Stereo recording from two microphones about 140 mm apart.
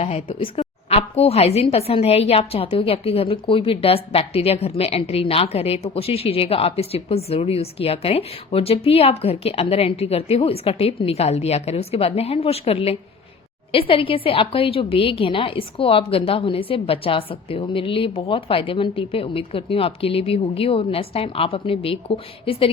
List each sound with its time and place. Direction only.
0.0 s a woman's voice: 45° left (ahead or behind)